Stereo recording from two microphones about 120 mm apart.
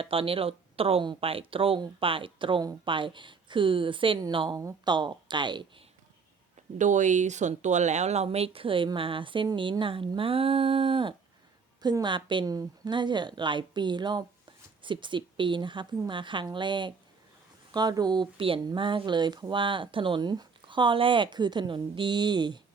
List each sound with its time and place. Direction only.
0.0 s speech: 50° right (ahead or behind)
4.5 s speech: 35° right (ahead or behind)
6.7 s speech: 90° right; by 11.1 s 50° right (ahead or behind)
11.8 s speech: 35° right (ahead or behind)